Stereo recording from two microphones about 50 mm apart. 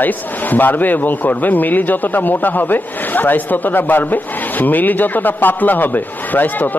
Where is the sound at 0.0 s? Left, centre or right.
Left.